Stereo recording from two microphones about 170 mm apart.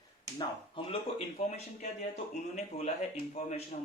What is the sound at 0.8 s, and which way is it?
Speech, 30° left (ahead or behind).